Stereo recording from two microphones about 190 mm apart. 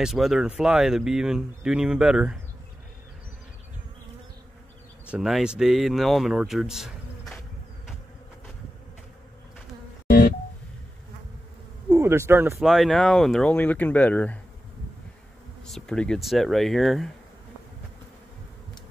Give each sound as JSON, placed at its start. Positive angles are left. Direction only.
{"t": 0.0, "sound": "speech", "side_deg": 0}
{"t": 5.1, "sound": "speech", "side_deg": -5}
{"t": 10.0, "sound": "music", "side_deg": 50}
{"t": 11.9, "sound": "speech", "side_deg": -15}
{"t": 12.6, "sound": "speech", "side_deg": 0}
{"t": 15.6, "sound": "speech", "side_deg": 5}